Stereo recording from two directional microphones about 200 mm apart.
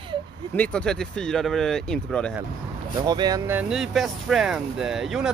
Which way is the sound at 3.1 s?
20° right (ahead or behind).